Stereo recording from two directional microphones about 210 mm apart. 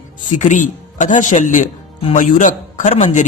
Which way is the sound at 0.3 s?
35° left (ahead or behind).